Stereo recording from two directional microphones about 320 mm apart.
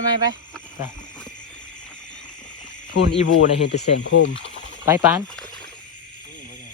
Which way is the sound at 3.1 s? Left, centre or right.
Left.